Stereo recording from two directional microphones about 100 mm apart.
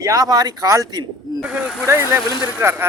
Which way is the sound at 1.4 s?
10° right (ahead or behind).